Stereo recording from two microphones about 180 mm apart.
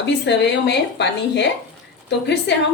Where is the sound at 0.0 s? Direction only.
75° left (ahead or behind).